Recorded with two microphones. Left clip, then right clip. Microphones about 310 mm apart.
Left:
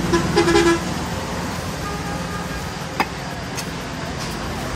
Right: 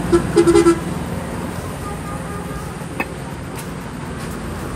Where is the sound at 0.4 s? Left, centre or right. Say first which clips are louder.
Right 3 dB; right.